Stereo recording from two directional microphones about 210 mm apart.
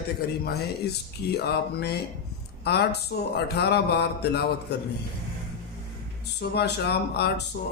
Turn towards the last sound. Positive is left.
turn(degrees=50)  # may be behind; listen again after turning